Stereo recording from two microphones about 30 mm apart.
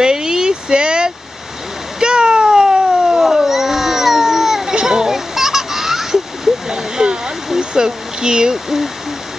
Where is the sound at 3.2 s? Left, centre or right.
Centre.